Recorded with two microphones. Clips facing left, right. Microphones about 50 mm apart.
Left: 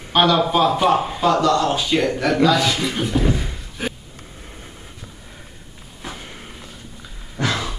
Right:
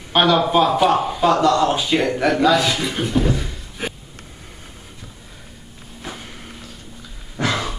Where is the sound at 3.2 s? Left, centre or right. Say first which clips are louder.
Even; centre.